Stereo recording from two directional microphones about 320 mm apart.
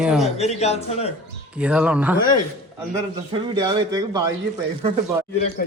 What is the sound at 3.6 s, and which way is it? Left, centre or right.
Speech, centre.